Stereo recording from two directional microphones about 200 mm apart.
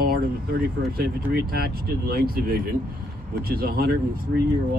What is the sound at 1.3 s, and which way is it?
Speech, 50° right (ahead or behind).